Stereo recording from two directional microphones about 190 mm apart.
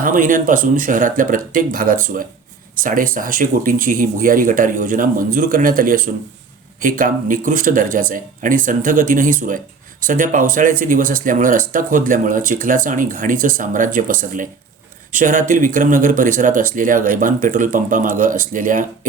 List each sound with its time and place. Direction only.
0.0 s speech: 45° right (ahead or behind)